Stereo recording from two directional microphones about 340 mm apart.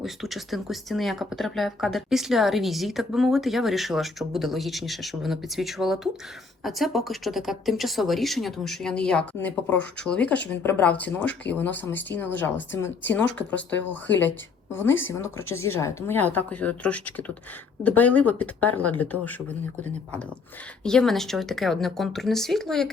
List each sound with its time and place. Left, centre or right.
0.0 s a woman's voice: centre
15.4 s speech: left
15.6 s speech: centre
20.8 s speech: centre